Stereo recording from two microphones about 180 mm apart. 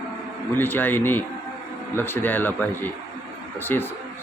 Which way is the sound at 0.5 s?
10° left (ahead or behind).